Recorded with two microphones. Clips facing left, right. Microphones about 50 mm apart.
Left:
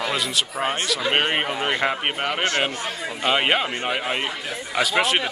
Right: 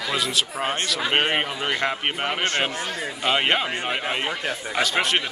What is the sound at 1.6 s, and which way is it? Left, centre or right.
Speech, centre.